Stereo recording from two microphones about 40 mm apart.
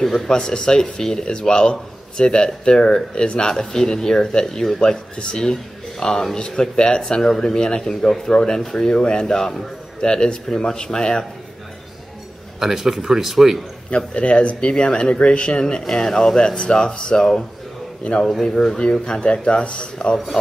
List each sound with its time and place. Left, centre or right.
0.0 s speech: centre
12.5 s a man's voice: centre
13.8 s speech: left
15.8 s speech: centre
16.3 s speech: centre